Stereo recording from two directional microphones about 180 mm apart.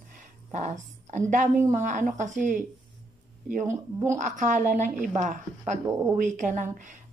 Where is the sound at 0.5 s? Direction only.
40° right (ahead or behind).